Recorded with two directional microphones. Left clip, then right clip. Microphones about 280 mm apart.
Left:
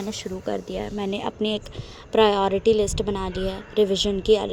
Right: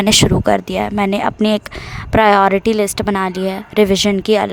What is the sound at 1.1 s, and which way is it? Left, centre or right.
Speech, right.